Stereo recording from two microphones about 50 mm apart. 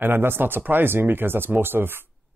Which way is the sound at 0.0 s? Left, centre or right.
Right.